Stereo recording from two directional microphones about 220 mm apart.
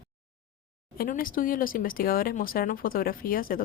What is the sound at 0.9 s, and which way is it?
A woman's voice, 40° left (ahead or behind).